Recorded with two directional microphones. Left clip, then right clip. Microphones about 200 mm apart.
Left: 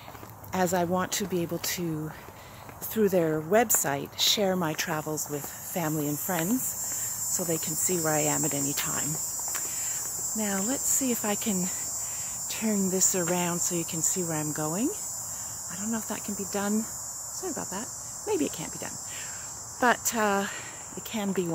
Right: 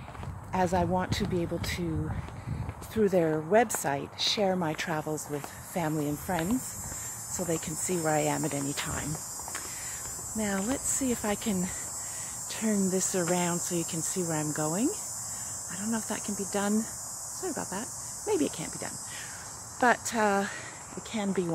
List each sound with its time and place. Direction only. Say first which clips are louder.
0.5 s speech: left 1 dB; 15° left (ahead or behind)
2.9 s speech: left 1 dB; 15° left (ahead or behind)
17.4 s insect: even; centre (ahead or behind)
19.8 s speech: even; 10° left (ahead or behind)